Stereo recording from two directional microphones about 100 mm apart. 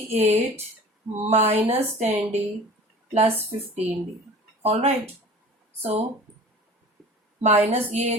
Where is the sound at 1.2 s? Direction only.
90° right.